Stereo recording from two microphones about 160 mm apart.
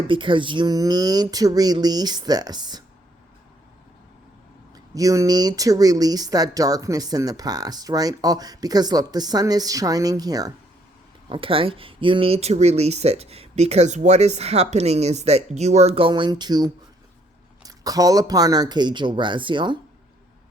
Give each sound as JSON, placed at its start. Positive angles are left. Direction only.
{"t": 0.1, "sound": "speech", "side_deg": -30}
{"t": 4.7, "sound": "speech", "side_deg": -20}
{"t": 11.3, "sound": "speech", "side_deg": -35}